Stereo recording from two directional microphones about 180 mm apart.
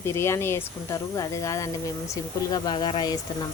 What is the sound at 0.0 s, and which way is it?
Speech, 15° left (ahead or behind).